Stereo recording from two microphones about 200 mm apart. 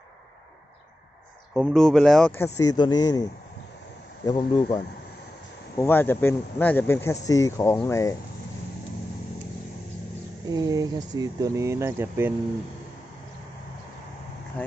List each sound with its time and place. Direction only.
1.5 s speech: centre (ahead or behind); by 3.2 s 20° left (ahead or behind)
4.3 s speech: 20° left (ahead or behind)
5.7 s speech: 10° left (ahead or behind)
10.5 s speech: 20° right (ahead or behind)